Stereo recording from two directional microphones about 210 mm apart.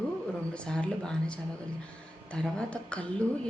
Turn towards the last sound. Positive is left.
turn(degrees=5)  # may be behind; listen again after turning